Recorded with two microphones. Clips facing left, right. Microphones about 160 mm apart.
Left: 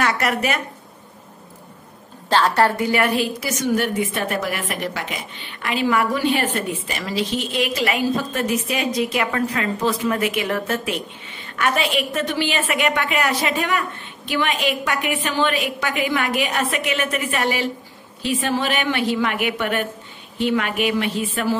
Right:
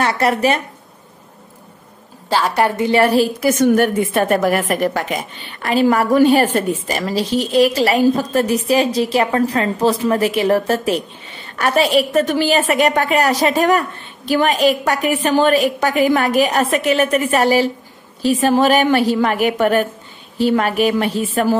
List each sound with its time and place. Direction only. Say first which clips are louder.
0.0 s a woman's voice: right 5 dB; 30° right (ahead or behind)
2.2 s a woman's voice: right 1 dB; 10° right (ahead or behind)
2.9 s a woman's voice: right 6 dB; 35° right (ahead or behind)